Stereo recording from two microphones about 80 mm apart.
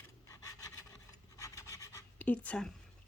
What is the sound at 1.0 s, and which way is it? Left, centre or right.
Filing, left.